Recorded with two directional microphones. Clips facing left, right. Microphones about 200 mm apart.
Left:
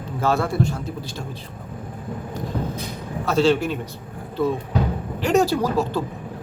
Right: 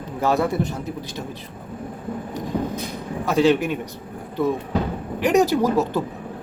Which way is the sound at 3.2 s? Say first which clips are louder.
Right 1 dB; 15° right (ahead or behind).